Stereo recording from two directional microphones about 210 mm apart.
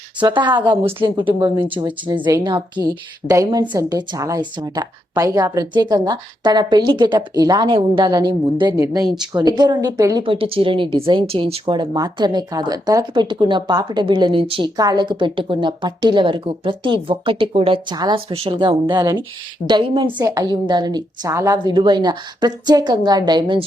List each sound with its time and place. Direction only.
0.2 s speech: 20° right (ahead or behind)
20.1 s speech: 10° right (ahead or behind)